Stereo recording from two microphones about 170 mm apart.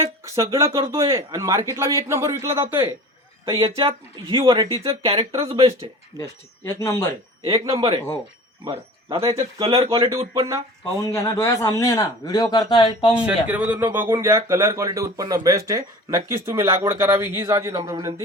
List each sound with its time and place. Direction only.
0.0 s a man's voice: 20° right (ahead or behind)
3.8 s speech: 30° right (ahead or behind)
6.1 s speech: 20° left (ahead or behind)
7.4 s speech: 20° right (ahead or behind)
7.8 s speech: 35° right (ahead or behind)
11.0 s a man's voice: 20° left (ahead or behind)
13.2 s a man's voice: 10° right (ahead or behind)